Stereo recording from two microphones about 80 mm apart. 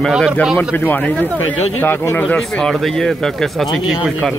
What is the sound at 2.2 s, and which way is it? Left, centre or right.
Speech, centre.